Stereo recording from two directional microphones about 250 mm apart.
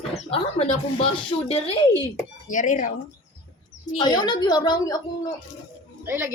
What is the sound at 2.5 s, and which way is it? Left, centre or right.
Child singing, left.